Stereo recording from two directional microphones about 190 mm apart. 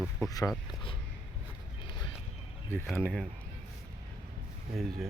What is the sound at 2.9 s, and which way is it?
Speech, 5° left (ahead or behind).